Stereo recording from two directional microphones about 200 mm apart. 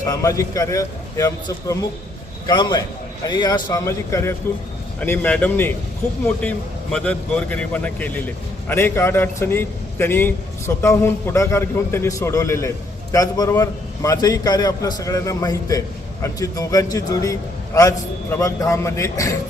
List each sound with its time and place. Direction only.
0.0 s a man's voice: 15° left (ahead or behind)